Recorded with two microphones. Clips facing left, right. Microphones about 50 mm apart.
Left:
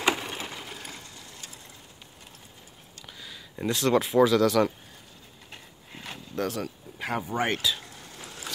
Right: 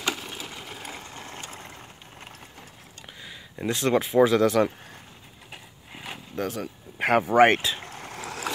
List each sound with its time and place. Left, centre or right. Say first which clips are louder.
0.0 s sewing machine: left 4 dB; left
0.5 s sewing machine: right 1 dB; centre
1.1 s vehicle: right 7 dB; right
3.1 s a sound: right 1 dB; right
3.6 s speech: even; right
5.5 s a sound: right 2 dB; centre
7.0 s speech: right 11 dB; right
7.5 s speech: right 2 dB; right
7.9 s vehicle: right 8 dB; right